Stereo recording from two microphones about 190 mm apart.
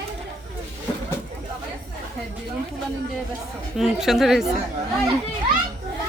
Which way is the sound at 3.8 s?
Centre (ahead or behind).